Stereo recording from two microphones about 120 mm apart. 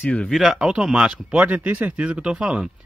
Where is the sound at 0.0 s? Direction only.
10° left (ahead or behind).